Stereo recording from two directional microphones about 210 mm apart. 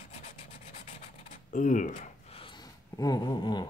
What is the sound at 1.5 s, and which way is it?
Speech, 35° left (ahead or behind).